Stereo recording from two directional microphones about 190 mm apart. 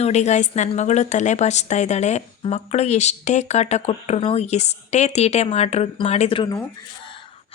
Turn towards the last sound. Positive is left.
turn(degrees=30)  # may be behind; listen again after turning